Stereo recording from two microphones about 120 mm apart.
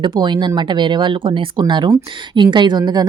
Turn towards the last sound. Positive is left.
turn(degrees=-35)  # may be behind; listen again after turning